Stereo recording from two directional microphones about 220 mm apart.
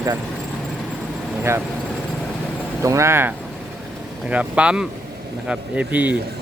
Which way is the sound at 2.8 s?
15° right (ahead or behind).